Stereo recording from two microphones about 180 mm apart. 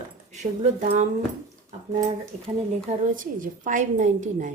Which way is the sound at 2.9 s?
45° right (ahead or behind).